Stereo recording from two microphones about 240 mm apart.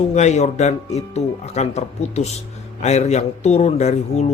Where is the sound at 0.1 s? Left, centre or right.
Left.